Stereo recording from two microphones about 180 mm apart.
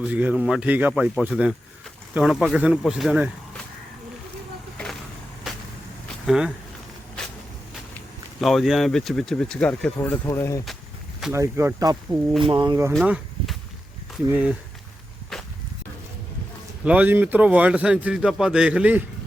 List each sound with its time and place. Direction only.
0.1 s a man's voice: 10° right (ahead or behind)
5.5 s vehicle: centre (ahead or behind)
6.2 s speech: 5° right (ahead or behind)
7.9 s speech: centre (ahead or behind)
11.2 s a man's voice: 10° right (ahead or behind)
12.9 s a sound: centre (ahead or behind)
14.3 s a man's voice: 5° right (ahead or behind)
15.3 s walk: centre (ahead or behind)
16.8 s a man's voice: 10° right (ahead or behind)